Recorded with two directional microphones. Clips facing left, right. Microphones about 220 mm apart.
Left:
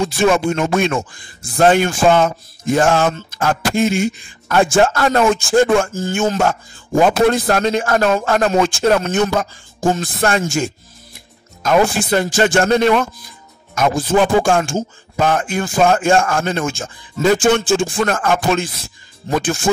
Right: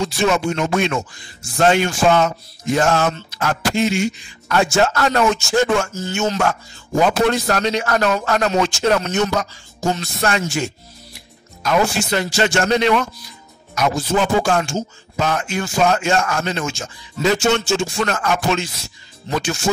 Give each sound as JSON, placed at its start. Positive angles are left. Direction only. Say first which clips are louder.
{"t": 0.0, "sound": "speech", "louder": "left 3 dB", "side_deg": 50}